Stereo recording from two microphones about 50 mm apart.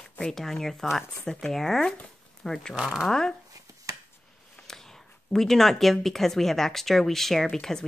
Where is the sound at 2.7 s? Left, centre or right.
Centre.